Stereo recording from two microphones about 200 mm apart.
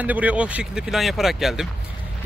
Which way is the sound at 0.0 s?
10° right (ahead or behind).